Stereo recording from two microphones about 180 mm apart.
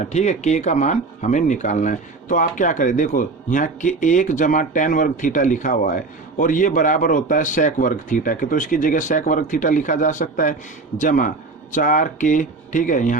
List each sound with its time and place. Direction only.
0.0 s speech: 40° left (ahead or behind)